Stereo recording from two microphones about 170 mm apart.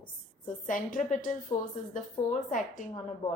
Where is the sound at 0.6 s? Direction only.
50° left (ahead or behind).